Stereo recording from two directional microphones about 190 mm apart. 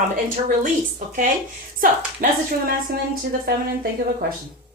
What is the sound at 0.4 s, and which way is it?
A woman's voice, 45° right (ahead or behind).